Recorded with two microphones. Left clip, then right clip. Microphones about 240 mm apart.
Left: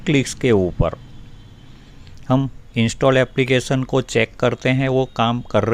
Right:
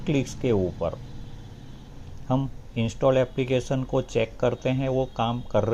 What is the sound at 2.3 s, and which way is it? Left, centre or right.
Speech, left.